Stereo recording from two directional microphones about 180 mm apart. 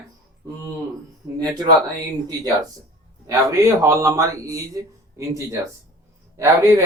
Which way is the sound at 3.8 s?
20° right (ahead or behind).